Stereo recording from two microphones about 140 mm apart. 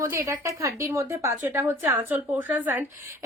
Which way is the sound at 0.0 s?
20° right (ahead or behind).